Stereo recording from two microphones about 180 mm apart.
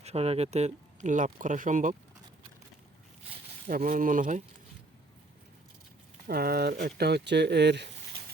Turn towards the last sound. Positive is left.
turn(degrees=-70)  # may be behind; listen again after turning